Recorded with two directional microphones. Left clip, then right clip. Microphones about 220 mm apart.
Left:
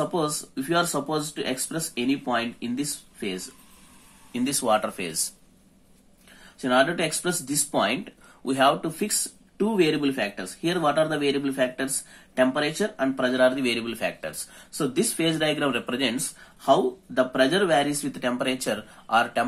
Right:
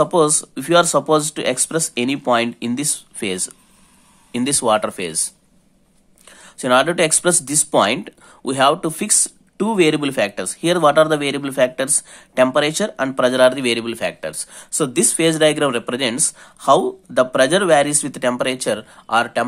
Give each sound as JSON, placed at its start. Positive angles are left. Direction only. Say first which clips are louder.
{"t": 0.0, "sound": "speech", "louder": "right 11 dB", "side_deg": -45}
{"t": 4.3, "sound": "speech", "louder": "right 6 dB", "side_deg": -35}
{"t": 6.6, "sound": "speech", "louder": "right 7 dB", "side_deg": -45}